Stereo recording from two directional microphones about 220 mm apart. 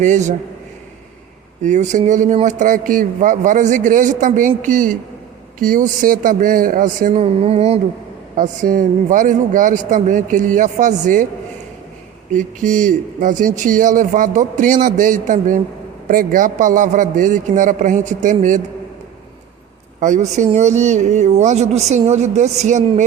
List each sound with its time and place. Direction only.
0.0 s speech: 35° right (ahead or behind)
1.6 s speech: 35° right (ahead or behind)
8.4 s speech: 40° right (ahead or behind)
12.3 s speech: 35° right (ahead or behind)
20.0 s speech: 35° right (ahead or behind)